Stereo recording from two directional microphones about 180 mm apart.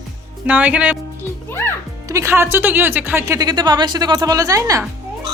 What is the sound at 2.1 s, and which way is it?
A woman's voice, 15° right (ahead or behind).